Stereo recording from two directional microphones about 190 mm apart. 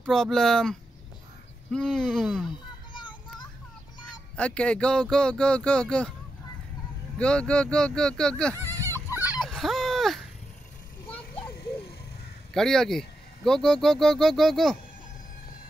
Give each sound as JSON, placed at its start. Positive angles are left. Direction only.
{"t": 0.0, "sound": "speech", "side_deg": 0}
{"t": 2.9, "sound": "a sound", "side_deg": 25}
{"t": 4.4, "sound": "speech", "side_deg": 5}
{"t": 7.2, "sound": "speech", "side_deg": 5}
{"t": 9.3, "sound": "dog", "side_deg": 0}
{"t": 12.5, "sound": "speech", "side_deg": 0}